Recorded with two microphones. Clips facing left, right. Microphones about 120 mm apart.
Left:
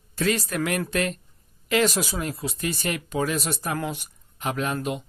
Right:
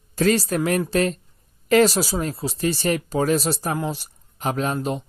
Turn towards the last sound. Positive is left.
turn(degrees=-35)  # may be behind; listen again after turning